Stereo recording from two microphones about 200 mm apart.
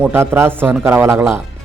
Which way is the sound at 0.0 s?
10° right (ahead or behind).